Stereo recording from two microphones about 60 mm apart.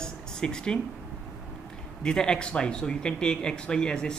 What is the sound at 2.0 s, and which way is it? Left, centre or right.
Speech, centre.